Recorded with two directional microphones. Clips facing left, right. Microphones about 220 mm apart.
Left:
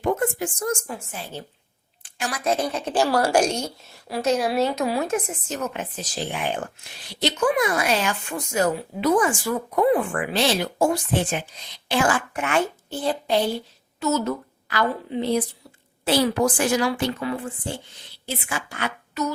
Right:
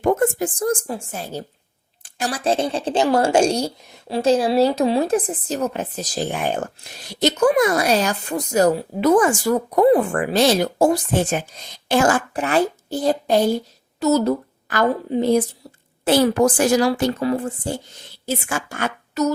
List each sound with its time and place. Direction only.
0.0 s a woman's voice: 45° right (ahead or behind)